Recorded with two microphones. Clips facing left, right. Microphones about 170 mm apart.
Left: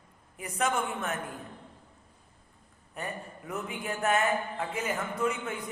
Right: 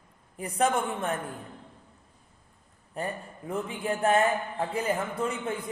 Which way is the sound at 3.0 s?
30° right (ahead or behind).